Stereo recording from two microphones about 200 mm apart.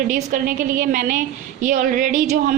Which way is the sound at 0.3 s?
45° right (ahead or behind).